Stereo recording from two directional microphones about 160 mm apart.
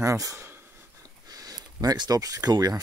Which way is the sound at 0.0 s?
20° right (ahead or behind).